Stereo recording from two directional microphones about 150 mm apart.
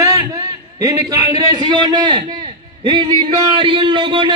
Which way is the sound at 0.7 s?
25° right (ahead or behind).